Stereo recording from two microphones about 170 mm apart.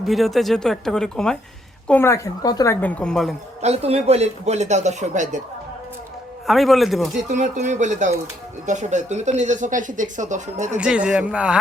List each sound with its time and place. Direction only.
0.0 s speech: centre (ahead or behind); by 2.7 s 20° left (ahead or behind)
2.8 s speech: 5° left (ahead or behind)
3.6 s speech: 35° right (ahead or behind)
6.5 s speech: centre (ahead or behind)
7.3 s speech: 45° right (ahead or behind)
10.8 s speech: 5° right (ahead or behind)